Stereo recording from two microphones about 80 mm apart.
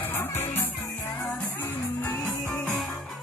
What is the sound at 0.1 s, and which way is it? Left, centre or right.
Music, left.